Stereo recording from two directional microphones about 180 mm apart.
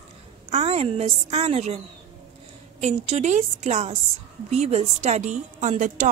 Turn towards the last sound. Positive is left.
turn(degrees=-45)  # may be behind; listen again after turning